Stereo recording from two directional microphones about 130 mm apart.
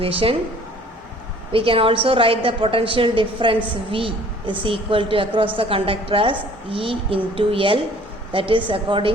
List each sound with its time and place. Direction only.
0.0 s a woman's voice: 45° right (ahead or behind)
1.5 s a woman's voice: 45° right (ahead or behind)